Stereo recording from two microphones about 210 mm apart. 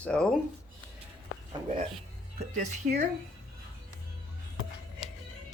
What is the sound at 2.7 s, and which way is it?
Speech, 35° right (ahead or behind).